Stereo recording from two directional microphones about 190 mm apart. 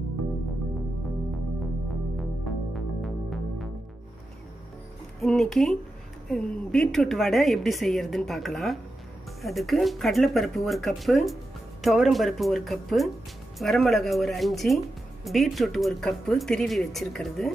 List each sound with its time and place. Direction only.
2.1 s music: centre (ahead or behind)
5.2 s a woman's voice: centre (ahead or behind)